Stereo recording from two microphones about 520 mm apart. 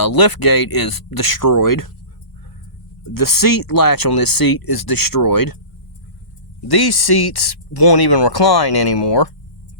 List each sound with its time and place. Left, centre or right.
0.0 s speech: left
3.2 s speech: left
6.7 s speech: left